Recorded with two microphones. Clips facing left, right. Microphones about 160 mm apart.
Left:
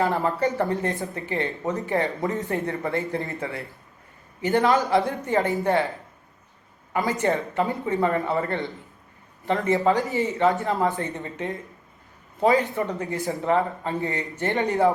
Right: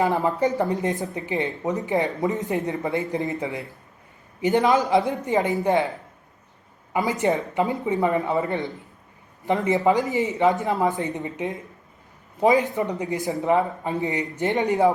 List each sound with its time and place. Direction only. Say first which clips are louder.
0.0 s speech: right 2 dB; 15° right (ahead or behind)
6.9 s speech: right 1 dB; 15° right (ahead or behind)